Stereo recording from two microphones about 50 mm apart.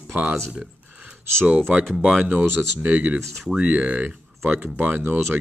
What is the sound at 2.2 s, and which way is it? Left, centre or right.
Speech, right.